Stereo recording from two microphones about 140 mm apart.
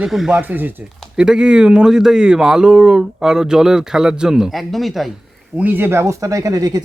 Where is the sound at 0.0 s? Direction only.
5° right (ahead or behind).